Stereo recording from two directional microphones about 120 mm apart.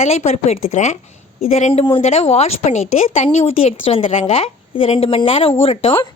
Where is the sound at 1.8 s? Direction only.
55° left (ahead or behind).